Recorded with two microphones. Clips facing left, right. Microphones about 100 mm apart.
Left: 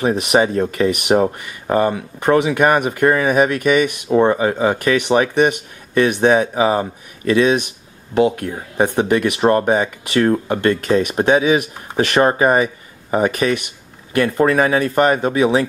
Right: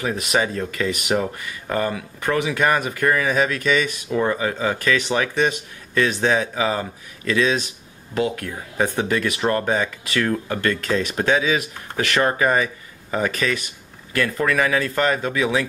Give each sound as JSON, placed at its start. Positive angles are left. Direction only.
{"t": 0.0, "sound": "speech", "side_deg": 25}
{"t": 4.1, "sound": "speech", "side_deg": 30}